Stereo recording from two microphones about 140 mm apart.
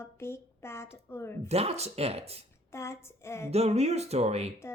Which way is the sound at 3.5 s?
50° right (ahead or behind).